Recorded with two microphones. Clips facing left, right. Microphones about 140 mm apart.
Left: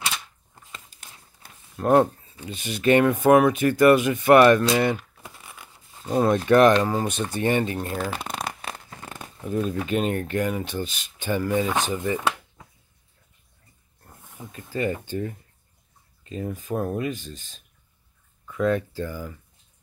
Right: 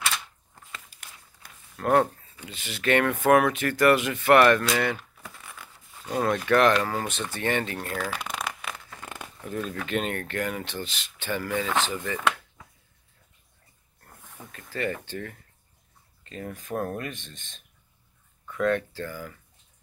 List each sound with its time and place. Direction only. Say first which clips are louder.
0.7 s speech: even; 25° left (ahead or behind)
8.2 s shuffling cards: left 2 dB; 30° left (ahead or behind)
8.9 s tearing: left 1 dB; 30° left (ahead or behind)
9.4 s speech: left 6 dB; 15° left (ahead or behind)
14.0 s speech: left 4 dB; 15° left (ahead or behind)
16.3 s speech: left 3 dB; 10° left (ahead or behind)